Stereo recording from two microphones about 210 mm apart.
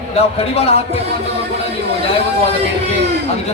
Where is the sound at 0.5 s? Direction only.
30° left (ahead or behind).